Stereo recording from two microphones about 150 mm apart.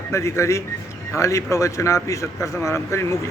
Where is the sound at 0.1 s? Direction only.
20° left (ahead or behind).